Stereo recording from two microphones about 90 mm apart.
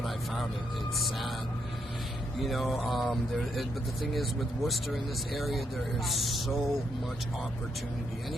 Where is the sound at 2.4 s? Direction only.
Centre (ahead or behind).